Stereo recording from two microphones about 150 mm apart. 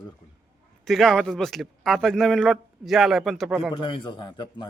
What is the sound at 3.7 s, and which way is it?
Speech, 30° left (ahead or behind).